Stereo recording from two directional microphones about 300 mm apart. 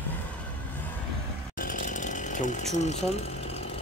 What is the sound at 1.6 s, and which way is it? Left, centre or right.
Ratchet, left.